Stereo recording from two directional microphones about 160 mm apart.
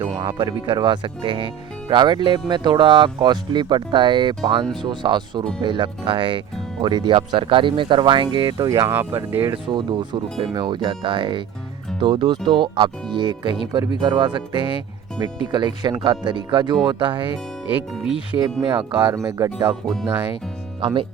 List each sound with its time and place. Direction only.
0.3 s speech: 30° right (ahead or behind); by 9.4 s 15° right (ahead or behind)
9.4 s speech: 30° right (ahead or behind)
17.7 s speech: 10° right (ahead or behind)
18.3 s speech: 25° right (ahead or behind)
20.8 s speech: 35° right (ahead or behind)